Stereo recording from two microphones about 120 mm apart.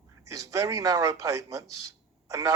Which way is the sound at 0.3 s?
25° right (ahead or behind).